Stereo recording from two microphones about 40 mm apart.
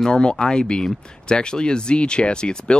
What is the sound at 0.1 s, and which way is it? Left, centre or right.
Speech, left.